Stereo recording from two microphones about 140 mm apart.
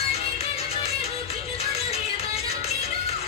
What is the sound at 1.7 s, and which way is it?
Music, 50° left (ahead or behind).